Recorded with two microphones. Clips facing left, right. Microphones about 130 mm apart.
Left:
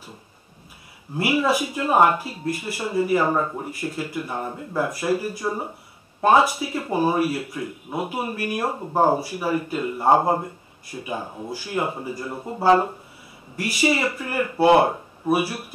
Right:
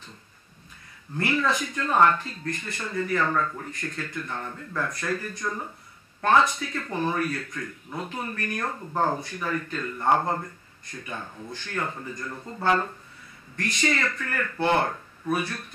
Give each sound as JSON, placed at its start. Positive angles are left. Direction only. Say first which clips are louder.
{"t": 1.1, "sound": "speech", "louder": "left 5 dB", "side_deg": 10}
{"t": 3.8, "sound": "speech", "louder": "left 5 dB", "side_deg": 10}
{"t": 4.9, "sound": "speech", "louder": "left 7 dB", "side_deg": 10}
{"t": 13.6, "sound": "speech", "louder": "left 5 dB", "side_deg": 10}